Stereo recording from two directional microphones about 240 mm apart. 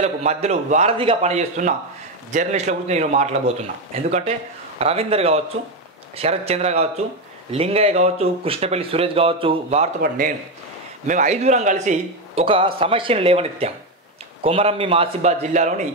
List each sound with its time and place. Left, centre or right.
0.0 s speech: right
10.0 s a man's voice: right